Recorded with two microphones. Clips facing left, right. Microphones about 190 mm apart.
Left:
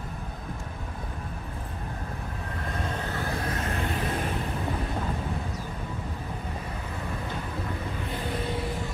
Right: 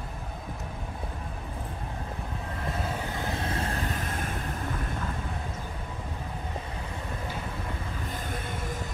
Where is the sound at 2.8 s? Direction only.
15° right (ahead or behind); by 4.1 s 40° right (ahead or behind).